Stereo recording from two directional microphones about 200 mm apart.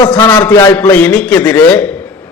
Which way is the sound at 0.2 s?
20° left (ahead or behind).